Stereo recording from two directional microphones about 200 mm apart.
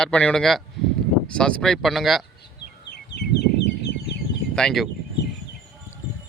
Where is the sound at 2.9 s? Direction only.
55° left (ahead or behind).